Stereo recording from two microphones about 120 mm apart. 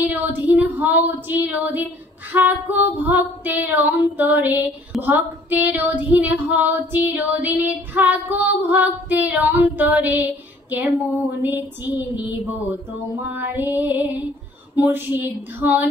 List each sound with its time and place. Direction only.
0.0 s female singing: 15° right (ahead or behind)
11.4 s female singing: 15° right (ahead or behind)